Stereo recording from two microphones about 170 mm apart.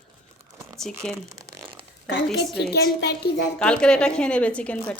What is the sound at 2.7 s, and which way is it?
Speech, 75° left (ahead or behind).